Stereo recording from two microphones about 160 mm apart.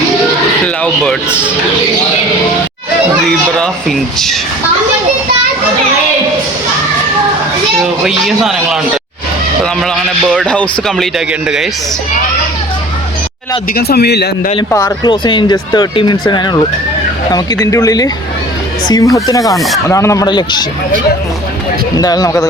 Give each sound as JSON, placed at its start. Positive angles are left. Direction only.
{"t": 0.6, "sound": "speech", "side_deg": 5}
{"t": 3.6, "sound": "a man's voice", "side_deg": 0}
{"t": 8.0, "sound": "a man's voice", "side_deg": 0}
{"t": 9.8, "sound": "a man's voice", "side_deg": 5}
{"t": 13.7, "sound": "a man's voice", "side_deg": 90}
{"t": 14.7, "sound": "speech", "side_deg": 15}
{"t": 15.0, "sound": "speech", "side_deg": 30}
{"t": 19.5, "sound": "a man's voice", "side_deg": 0}
{"t": 19.9, "sound": "speech", "side_deg": 20}
{"t": 21.9, "sound": "speech", "side_deg": 25}